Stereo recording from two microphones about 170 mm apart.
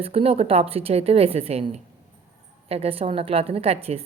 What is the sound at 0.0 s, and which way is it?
A woman's voice, 35° right (ahead or behind).